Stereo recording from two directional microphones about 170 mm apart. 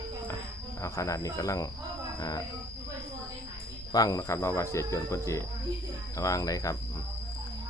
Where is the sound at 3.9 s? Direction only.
20° left (ahead or behind).